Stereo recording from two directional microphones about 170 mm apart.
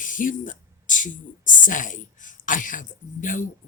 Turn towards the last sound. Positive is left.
turn(degrees=50)  # may be behind; listen again after turning